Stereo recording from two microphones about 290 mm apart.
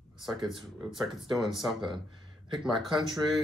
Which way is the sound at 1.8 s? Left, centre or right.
Centre.